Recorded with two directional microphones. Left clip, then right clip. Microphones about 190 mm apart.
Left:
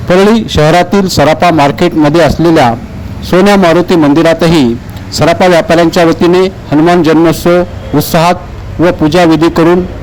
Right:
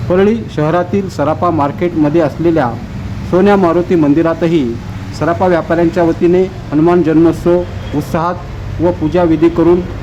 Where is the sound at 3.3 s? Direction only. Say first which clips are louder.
Left 4 dB; 30° left (ahead or behind).